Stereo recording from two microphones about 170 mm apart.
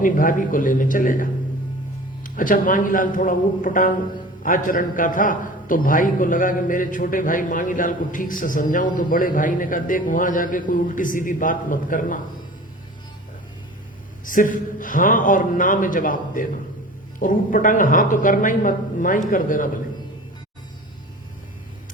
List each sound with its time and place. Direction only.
0.0 s a man's voice: 55° left (ahead or behind)
14.3 s a man's voice: 50° left (ahead or behind)